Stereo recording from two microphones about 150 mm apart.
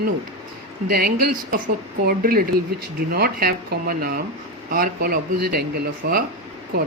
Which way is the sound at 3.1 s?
90° right.